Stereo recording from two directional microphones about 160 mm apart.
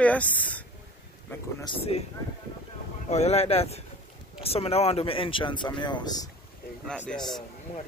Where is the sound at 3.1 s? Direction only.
45° left (ahead or behind); by 6.2 s 25° left (ahead or behind).